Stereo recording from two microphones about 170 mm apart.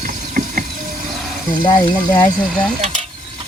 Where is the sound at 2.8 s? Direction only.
40° right (ahead or behind).